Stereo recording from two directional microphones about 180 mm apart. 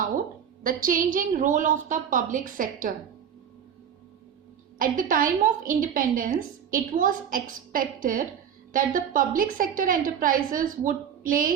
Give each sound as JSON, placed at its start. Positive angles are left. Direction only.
{"t": 0.0, "sound": "a woman's voice", "side_deg": -50}
{"t": 4.8, "sound": "a woman's voice", "side_deg": -50}